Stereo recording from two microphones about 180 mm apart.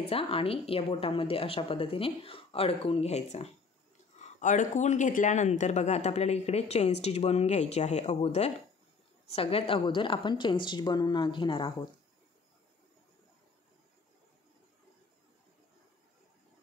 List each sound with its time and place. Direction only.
0.0 s a woman's voice: 30° left (ahead or behind)